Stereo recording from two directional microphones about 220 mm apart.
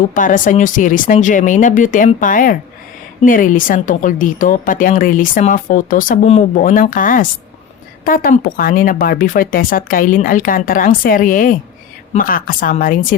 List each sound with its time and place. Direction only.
0.0 s a woman's voice: 40° left (ahead or behind)